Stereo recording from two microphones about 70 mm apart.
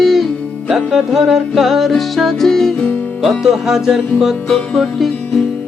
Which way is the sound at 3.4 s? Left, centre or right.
Centre.